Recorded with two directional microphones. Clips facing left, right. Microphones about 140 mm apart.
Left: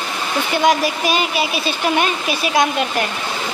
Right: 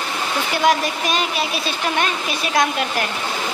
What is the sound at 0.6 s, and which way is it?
A woman's voice, centre (ahead or behind).